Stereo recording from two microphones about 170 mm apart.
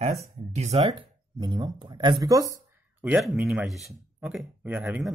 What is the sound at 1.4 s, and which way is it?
Speech, 25° right (ahead or behind).